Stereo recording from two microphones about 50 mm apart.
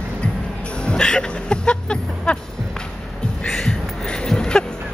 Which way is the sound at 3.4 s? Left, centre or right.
Centre.